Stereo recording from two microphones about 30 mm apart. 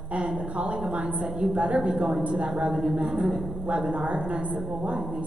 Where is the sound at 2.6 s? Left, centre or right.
Right.